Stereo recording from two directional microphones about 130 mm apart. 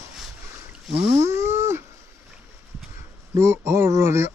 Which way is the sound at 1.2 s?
20° right (ahead or behind).